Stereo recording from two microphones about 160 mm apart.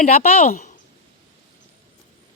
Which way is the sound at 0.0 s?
60° left (ahead or behind).